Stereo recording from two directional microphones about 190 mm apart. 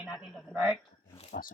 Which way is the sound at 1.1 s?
30° left (ahead or behind).